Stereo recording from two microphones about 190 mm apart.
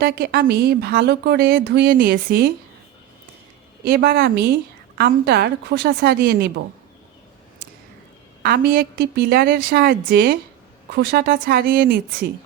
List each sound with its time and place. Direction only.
0.0 s a woman's voice: 55° right (ahead or behind)
3.8 s a woman's voice: 50° right (ahead or behind)
8.4 s a woman's voice: 50° right (ahead or behind)